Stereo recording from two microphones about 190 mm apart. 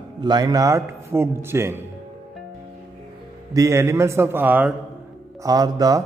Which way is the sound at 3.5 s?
15° right (ahead or behind).